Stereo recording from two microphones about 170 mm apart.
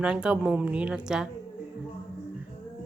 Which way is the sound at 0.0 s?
5° right (ahead or behind).